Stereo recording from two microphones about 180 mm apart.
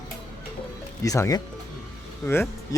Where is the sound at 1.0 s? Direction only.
20° left (ahead or behind).